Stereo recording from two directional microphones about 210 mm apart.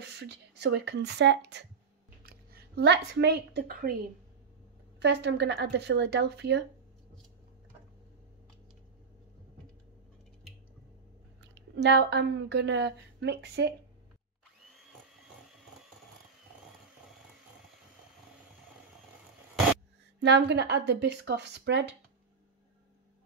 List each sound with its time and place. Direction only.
0.0 s a woman's voice: 55° right (ahead or behind)
5.0 s speech: 55° right (ahead or behind)
11.4 s a woman's voice: 55° right (ahead or behind)
20.2 s speech: 55° right (ahead or behind)